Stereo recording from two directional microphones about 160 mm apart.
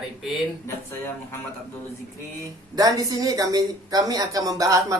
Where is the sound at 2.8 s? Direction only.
20° right (ahead or behind).